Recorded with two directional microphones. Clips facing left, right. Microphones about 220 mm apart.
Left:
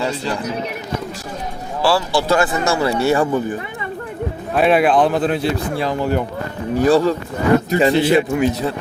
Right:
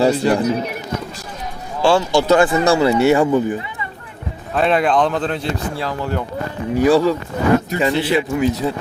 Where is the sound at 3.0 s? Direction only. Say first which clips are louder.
Right 3 dB; 20° right (ahead or behind).